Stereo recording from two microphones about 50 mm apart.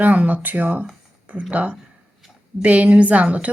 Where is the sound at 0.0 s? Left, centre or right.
Right.